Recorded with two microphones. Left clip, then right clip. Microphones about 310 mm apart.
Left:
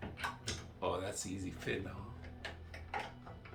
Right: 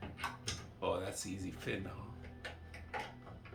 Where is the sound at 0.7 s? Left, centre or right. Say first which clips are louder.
Even; centre.